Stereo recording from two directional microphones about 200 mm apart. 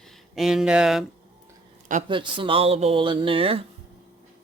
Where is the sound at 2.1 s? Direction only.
25° right (ahead or behind).